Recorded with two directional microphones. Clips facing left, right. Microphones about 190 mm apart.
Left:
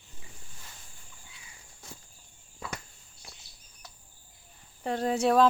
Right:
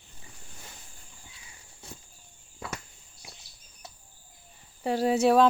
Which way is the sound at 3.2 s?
15° right (ahead or behind).